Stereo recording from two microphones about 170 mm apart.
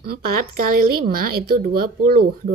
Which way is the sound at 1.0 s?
60° right (ahead or behind).